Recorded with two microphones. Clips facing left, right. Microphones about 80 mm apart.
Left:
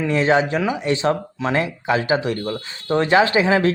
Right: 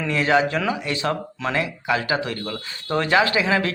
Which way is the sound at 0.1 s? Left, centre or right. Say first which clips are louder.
Left 1 dB; left.